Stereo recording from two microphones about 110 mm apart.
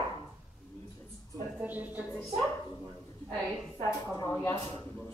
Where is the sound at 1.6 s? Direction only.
15° right (ahead or behind).